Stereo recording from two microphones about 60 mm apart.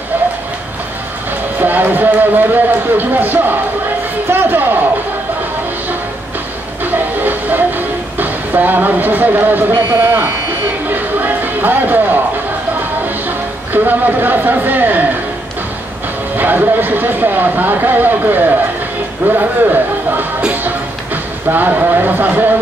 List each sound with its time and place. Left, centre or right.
1.6 s speech: right
6.8 s train: right
10.9 s a sound: right
13.8 s speech: right
16.3 s speech: right
20.6 s a sound: right